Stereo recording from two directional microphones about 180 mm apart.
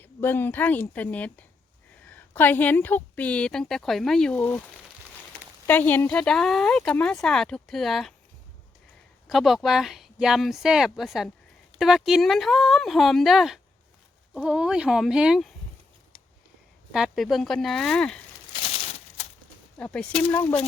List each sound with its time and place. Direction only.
0.0 s a woman's voice: 10° left (ahead or behind)
5.6 s speech: 10° left (ahead or behind)
9.2 s speech: centre (ahead or behind)
16.9 s speech: centre (ahead or behind)
18.5 s a sound: 35° left (ahead or behind)
19.8 s a woman's voice: 5° left (ahead or behind)